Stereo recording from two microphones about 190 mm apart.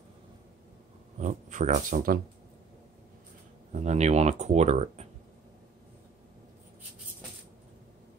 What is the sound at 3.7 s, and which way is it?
Speech, 35° right (ahead or behind).